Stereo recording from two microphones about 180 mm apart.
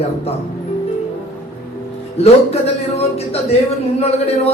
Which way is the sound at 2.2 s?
35° left (ahead or behind).